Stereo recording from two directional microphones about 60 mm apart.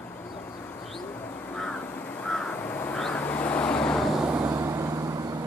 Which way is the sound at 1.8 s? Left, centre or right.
Left.